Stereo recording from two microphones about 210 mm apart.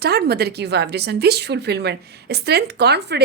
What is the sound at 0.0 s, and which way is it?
A woman's voice, 50° right (ahead or behind).